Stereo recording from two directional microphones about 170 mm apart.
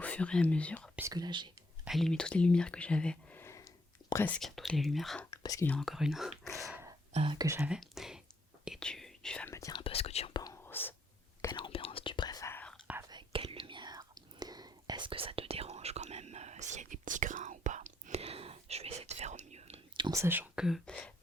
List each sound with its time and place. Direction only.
0.0 s speech: 5° left (ahead or behind)
0.9 s speech: 20° right (ahead or behind)
1.8 s speech: centre (ahead or behind)
5.3 s whispering: 20° left (ahead or behind)
5.6 s speech: 5° left (ahead or behind)
7.1 s speech: 30° right (ahead or behind)
7.4 s speech: 10° right (ahead or behind)
9.5 s speech: 20° left (ahead or behind)
9.8 s whispering: 35° left (ahead or behind); by 10.9 s 10° left (ahead or behind)
11.5 s whispering: 30° left (ahead or behind); by 12.8 s 10° left (ahead or behind)
13.1 s whispering: 30° right (ahead or behind)
20.1 s speech: 15° right (ahead or behind); by 21.1 s 5° left (ahead or behind)